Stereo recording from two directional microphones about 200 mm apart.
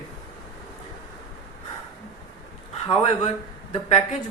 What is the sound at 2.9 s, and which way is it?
A woman's voice, 35° left (ahead or behind).